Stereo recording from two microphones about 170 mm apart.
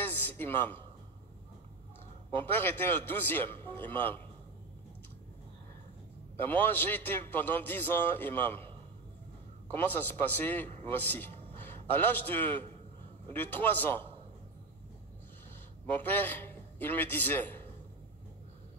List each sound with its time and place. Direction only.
0.0 s a sound: 10° left (ahead or behind)
2.4 s a man's voice: 10° left (ahead or behind)
6.3 s a man's voice: 10° left (ahead or behind)
9.7 s a man's voice: 10° left (ahead or behind)
15.9 s a man's voice: 10° left (ahead or behind)